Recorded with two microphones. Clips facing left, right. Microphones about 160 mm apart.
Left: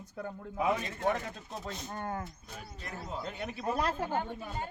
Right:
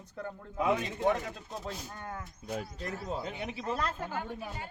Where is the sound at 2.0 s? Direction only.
40° left (ahead or behind).